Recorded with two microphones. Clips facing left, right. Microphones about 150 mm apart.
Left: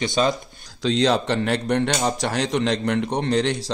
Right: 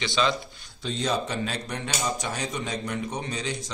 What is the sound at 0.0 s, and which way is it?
Speech, 45° left (ahead or behind).